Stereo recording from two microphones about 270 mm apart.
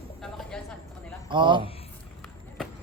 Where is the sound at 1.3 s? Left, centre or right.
Centre.